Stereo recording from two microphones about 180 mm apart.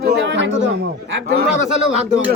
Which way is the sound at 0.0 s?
65° right (ahead or behind).